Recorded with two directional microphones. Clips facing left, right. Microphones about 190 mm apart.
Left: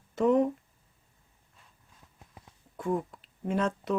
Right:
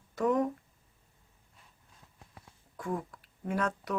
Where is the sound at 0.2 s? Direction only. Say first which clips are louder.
Left 4 dB; 25° left (ahead or behind).